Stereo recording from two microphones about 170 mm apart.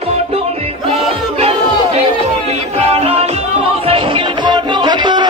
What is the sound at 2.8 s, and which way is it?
Music, 35° right (ahead or behind).